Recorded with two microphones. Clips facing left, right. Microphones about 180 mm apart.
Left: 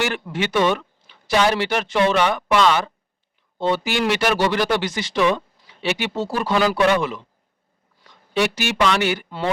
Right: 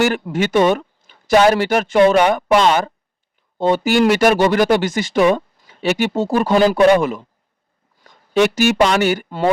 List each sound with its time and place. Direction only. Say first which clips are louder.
0.0 s speech: right 6 dB; 45° right (ahead or behind)